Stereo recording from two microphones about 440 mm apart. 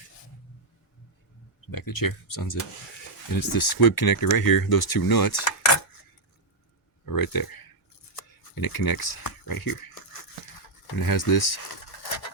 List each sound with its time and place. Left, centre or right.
1.7 s speech: left
7.0 s speech: left
8.5 s speech: left